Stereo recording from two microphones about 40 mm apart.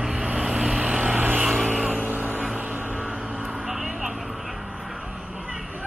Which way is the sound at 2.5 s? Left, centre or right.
Right.